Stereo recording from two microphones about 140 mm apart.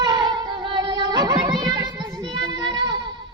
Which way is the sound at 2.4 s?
30° right (ahead or behind).